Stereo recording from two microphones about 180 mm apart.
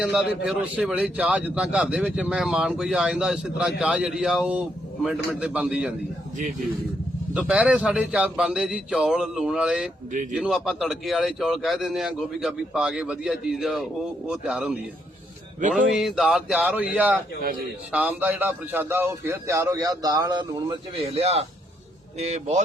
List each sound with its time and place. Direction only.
0.0 s a man's voice: centre (ahead or behind)
7.3 s a man's voice: 5° right (ahead or behind)
17.4 s a man's voice: 55° right (ahead or behind)
17.9 s a man's voice: 10° right (ahead or behind); by 22.6 s 40° right (ahead or behind)